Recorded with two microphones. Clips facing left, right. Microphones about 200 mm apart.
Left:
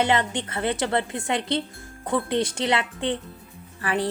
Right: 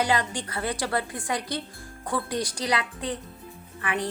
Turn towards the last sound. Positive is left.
turn(degrees=35)  # may be behind; listen again after turning